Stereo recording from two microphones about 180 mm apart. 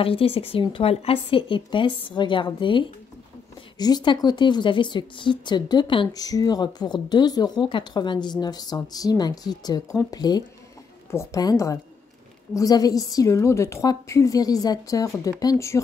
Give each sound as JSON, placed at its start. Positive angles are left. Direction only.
{"t": 0.0, "sound": "a woman's voice", "side_deg": 30}